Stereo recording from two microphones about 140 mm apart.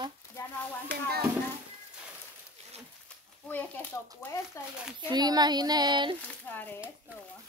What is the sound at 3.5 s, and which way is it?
Speech, 10° left (ahead or behind).